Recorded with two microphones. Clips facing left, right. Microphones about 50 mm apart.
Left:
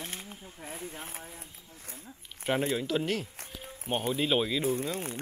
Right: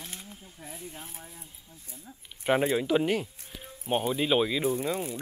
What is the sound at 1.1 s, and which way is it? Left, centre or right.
Speech, left.